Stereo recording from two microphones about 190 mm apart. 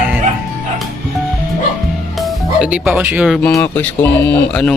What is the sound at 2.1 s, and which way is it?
Speech, centre (ahead or behind).